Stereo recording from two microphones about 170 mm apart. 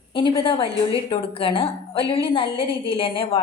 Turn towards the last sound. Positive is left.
turn(degrees=30)  # may be behind; listen again after turning